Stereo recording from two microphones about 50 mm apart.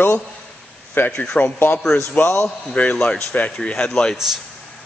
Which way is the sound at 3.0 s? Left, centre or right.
Centre.